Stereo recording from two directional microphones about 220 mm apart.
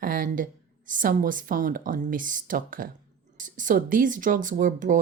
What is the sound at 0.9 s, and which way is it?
Speech, 40° right (ahead or behind).